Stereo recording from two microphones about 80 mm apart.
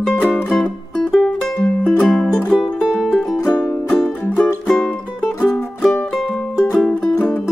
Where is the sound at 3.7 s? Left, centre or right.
Centre.